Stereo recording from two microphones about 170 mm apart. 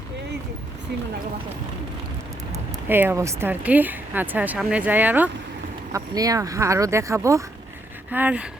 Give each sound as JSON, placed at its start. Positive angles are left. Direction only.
{"t": 2.9, "sound": "speech", "side_deg": -10}
{"t": 5.9, "sound": "speech", "side_deg": -20}